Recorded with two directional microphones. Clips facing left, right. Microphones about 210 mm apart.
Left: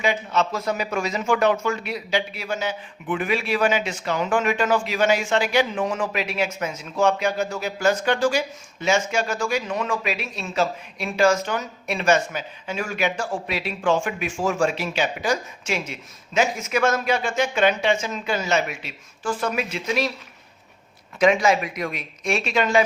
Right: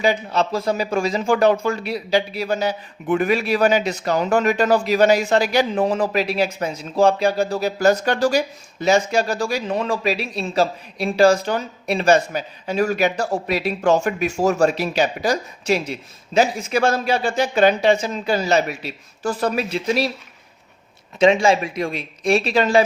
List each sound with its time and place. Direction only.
0.0 s speech: 35° right (ahead or behind)
21.2 s speech: 25° right (ahead or behind)